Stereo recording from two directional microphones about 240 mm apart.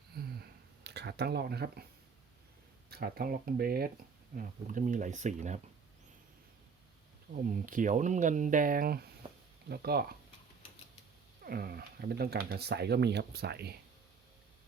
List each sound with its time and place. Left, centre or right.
0.1 s a sound: right
2.9 s speech: right
7.4 s speech: right
11.4 s speech: right